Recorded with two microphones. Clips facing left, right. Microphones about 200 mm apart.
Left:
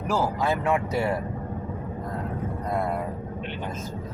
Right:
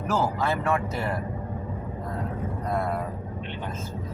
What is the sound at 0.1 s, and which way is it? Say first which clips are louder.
Speech: left 1 dB; 15° left (ahead or behind).